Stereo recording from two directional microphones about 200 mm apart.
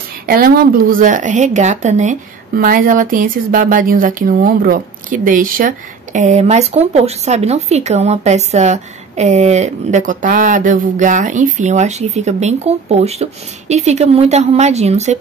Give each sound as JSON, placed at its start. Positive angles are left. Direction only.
{"t": 0.3, "sound": "a woman's voice", "side_deg": -50}